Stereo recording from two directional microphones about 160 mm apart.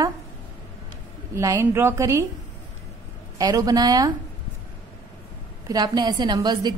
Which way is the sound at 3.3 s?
25° right (ahead or behind).